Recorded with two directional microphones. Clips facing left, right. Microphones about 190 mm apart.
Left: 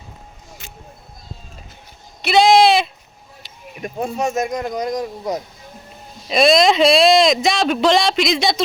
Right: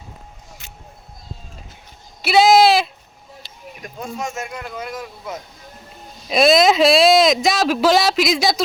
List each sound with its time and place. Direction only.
2.2 s a sound: 5° right (ahead or behind)
4.0 s speech: 35° left (ahead or behind)
6.2 s speech: centre (ahead or behind)